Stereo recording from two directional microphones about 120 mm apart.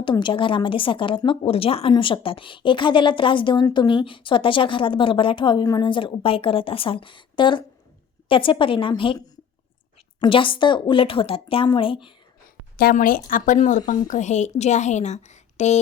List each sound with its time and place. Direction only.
0.0 s a woman's voice: 40° left (ahead or behind)
10.2 s a woman's voice: 45° left (ahead or behind)
13.2 s speech: 90° left
14.1 s a woman's voice: 80° left